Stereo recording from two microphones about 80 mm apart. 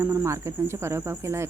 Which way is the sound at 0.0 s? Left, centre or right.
Right.